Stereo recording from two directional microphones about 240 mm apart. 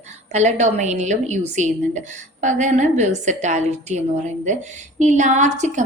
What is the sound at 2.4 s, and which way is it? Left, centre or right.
A woman's voice, right.